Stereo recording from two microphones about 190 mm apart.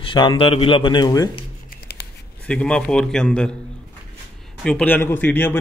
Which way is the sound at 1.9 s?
55° left (ahead or behind).